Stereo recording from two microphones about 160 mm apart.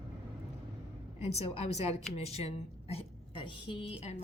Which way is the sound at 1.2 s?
40° left (ahead or behind).